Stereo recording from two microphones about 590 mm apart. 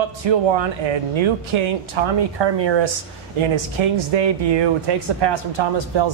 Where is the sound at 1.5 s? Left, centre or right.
Right.